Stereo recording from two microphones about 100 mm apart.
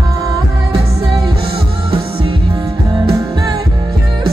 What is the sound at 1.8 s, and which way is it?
Music, 65° right (ahead or behind).